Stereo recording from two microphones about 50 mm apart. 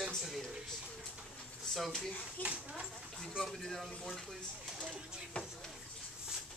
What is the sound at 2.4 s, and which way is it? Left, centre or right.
Speech, left.